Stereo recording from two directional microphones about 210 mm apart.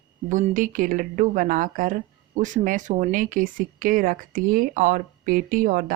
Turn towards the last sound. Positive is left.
turn(degrees=-40)  # may be behind; listen again after turning